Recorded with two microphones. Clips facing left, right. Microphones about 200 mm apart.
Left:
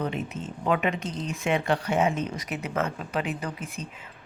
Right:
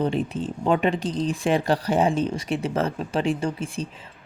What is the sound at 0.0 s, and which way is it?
Speech, 30° right (ahead or behind).